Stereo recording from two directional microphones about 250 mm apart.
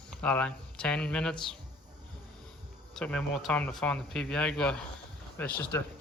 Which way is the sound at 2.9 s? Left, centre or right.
Centre.